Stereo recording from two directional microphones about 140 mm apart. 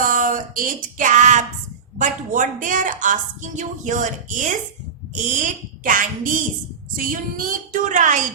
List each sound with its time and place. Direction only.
0.0 s a sound: 75° right (ahead or behind)
2.0 s a woman's voice: 70° right (ahead or behind)
5.8 s a woman's voice: 75° right (ahead or behind)